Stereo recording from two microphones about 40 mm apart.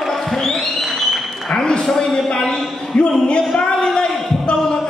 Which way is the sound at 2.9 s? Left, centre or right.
Left.